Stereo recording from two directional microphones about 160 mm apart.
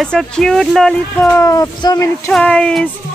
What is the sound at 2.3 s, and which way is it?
Speech, 5° left (ahead or behind).